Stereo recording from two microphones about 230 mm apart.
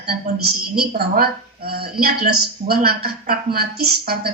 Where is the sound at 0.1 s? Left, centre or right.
Right.